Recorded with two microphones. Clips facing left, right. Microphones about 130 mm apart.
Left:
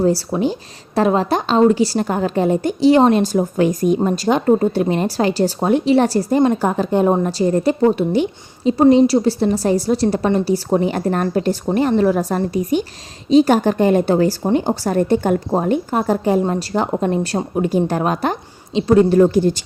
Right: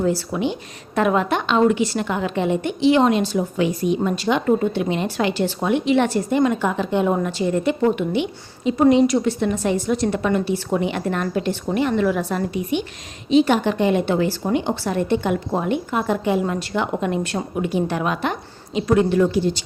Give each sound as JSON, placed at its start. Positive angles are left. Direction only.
{"t": 0.0, "sound": "a woman's voice", "side_deg": 35}